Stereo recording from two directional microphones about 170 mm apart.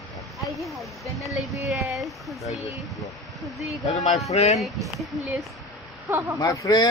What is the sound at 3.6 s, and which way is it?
Speech, centre (ahead or behind).